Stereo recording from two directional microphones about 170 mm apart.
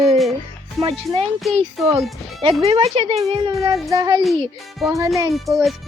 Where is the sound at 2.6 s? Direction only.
35° right (ahead or behind).